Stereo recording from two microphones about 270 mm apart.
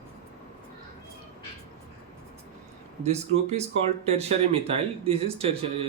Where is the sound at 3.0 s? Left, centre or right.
Right.